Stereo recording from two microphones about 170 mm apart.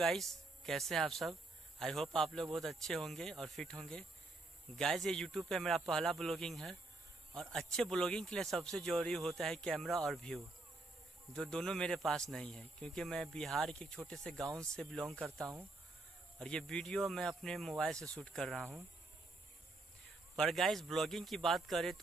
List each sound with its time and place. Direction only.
0.0 s speech: centre (ahead or behind)
20.3 s speech: centre (ahead or behind)